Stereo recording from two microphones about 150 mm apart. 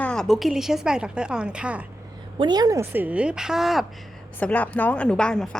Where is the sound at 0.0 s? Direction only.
5° left (ahead or behind).